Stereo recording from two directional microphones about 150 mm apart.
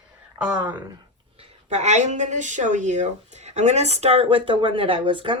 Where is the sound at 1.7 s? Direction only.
50° right (ahead or behind); by 5.3 s 35° right (ahead or behind).